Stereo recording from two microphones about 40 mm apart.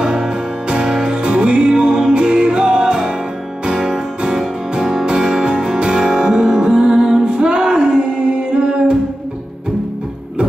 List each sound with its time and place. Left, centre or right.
0.0 s music: centre